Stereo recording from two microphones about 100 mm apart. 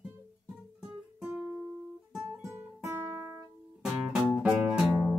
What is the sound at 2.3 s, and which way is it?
Music, 25° right (ahead or behind).